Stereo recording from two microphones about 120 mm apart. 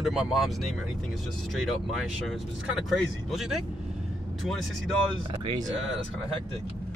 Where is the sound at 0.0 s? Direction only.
Centre (ahead or behind).